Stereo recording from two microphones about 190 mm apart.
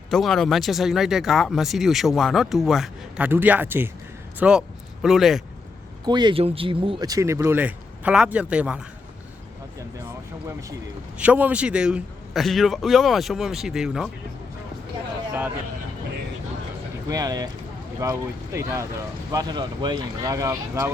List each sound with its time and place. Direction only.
0.1 s speech: centre (ahead or behind)
6.1 s speech: 25° right (ahead or behind); by 8.8 s 5° right (ahead or behind)
11.2 s speech: 10° right (ahead or behind)
17.1 s speech: 20° right (ahead or behind)